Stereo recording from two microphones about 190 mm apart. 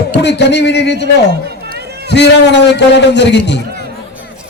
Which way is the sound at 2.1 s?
65° left (ahead or behind).